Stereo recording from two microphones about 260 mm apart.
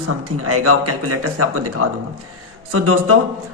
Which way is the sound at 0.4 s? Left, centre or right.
Right.